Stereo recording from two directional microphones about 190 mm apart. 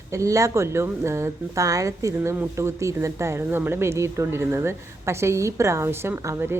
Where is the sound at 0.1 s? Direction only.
15° right (ahead or behind).